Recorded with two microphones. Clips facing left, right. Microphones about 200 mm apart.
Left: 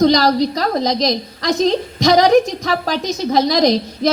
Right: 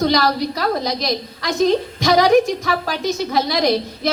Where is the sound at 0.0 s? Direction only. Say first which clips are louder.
Left 5 dB; 40° left (ahead or behind).